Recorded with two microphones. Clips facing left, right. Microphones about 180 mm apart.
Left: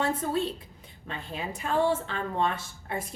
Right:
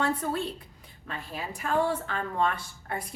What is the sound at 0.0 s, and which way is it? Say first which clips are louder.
A woman's voice: left 1 dB; 20° left (ahead or behind).